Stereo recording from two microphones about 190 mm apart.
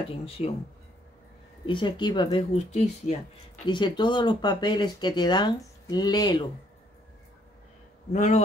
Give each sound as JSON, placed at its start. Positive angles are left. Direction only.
{"t": 0.4, "sound": "a man's voice", "side_deg": 35}
{"t": 1.7, "sound": "speech", "side_deg": 25}
{"t": 3.6, "sound": "speech", "side_deg": 25}
{"t": 8.1, "sound": "a man's voice", "side_deg": 40}